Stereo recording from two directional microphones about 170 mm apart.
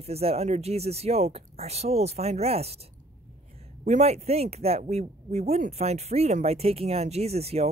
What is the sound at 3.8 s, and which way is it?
Speech, 40° right (ahead or behind).